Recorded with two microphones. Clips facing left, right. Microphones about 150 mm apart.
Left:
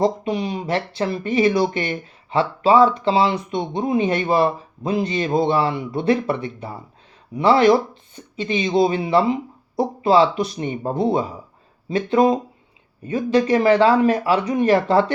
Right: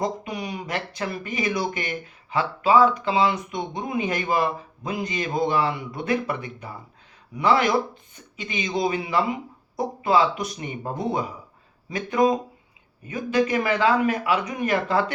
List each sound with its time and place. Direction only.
0.0 s speech: 25° left (ahead or behind)